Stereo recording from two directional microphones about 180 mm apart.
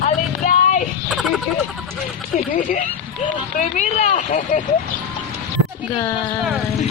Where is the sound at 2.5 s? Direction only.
45° left (ahead or behind).